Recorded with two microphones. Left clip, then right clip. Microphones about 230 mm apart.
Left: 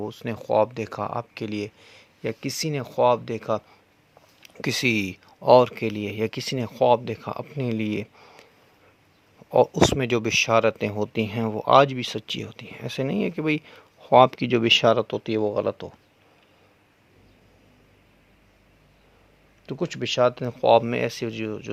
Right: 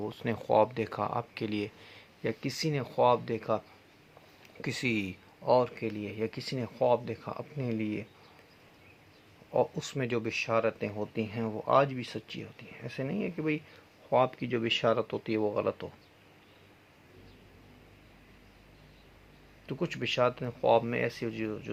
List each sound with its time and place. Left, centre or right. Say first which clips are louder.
0.0 s speech: left 3 dB; left
9.5 s speech: left 12 dB; left
19.6 s speech: left 5 dB; left